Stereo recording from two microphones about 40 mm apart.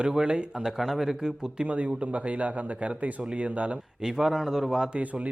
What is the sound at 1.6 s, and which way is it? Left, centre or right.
Speech, right.